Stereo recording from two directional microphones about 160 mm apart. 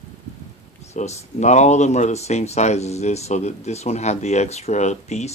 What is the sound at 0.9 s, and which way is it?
Speech, 45° left (ahead or behind).